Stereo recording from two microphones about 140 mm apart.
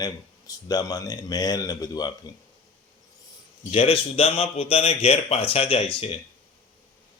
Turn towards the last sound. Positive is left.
turn(degrees=40)  # may be behind; listen again after turning